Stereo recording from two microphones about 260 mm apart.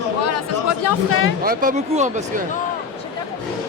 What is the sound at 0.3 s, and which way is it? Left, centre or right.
Chatter, left.